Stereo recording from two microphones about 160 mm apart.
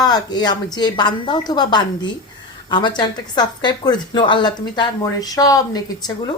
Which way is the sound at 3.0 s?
25° left (ahead or behind).